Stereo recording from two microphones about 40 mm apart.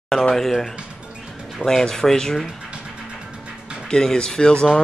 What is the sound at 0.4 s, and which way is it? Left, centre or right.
A man's voice, centre.